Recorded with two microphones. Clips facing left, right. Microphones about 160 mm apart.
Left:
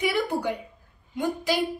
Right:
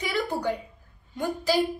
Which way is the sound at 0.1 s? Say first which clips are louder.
Left 1 dB; 15° left (ahead or behind).